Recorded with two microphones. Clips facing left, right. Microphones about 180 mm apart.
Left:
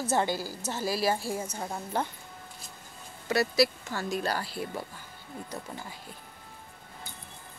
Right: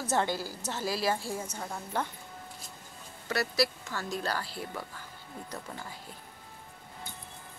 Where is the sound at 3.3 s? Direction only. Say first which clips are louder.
Left 4 dB; 15° left (ahead or behind).